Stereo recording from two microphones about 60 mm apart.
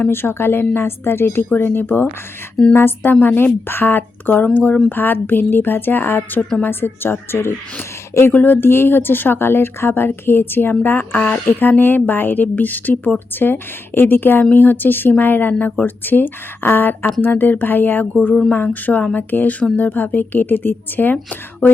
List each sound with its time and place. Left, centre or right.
0.1 s a woman's voice: left